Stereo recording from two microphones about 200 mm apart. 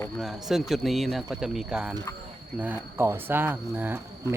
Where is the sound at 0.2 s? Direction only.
Centre (ahead or behind).